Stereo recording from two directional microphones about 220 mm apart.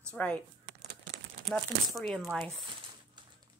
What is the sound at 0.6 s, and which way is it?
Crumpling, 50° right (ahead or behind).